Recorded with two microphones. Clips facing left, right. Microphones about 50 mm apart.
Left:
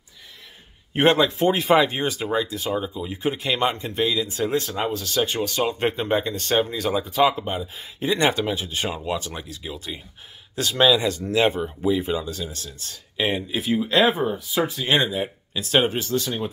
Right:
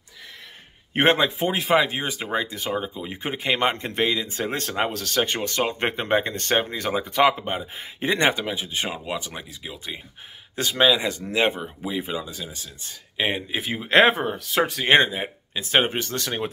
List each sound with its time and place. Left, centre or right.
0.9 s speech: right
1.4 s speech: centre
2.0 s speech: right
3.7 s speech: right
4.6 s speech: right
7.4 s speech: right
8.4 s speech: centre
10.5 s speech: right
13.9 s speech: right
14.3 s speech: right
15.0 s speech: right
16.0 s speech: right